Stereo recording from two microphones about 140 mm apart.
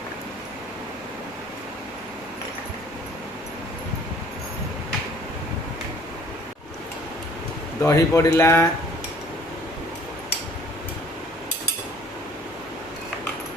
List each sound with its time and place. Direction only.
7.8 s speech: 20° left (ahead or behind)